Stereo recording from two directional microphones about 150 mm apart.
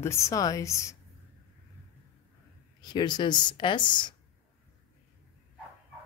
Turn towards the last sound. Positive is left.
turn(degrees=30)  # may be behind; listen again after turning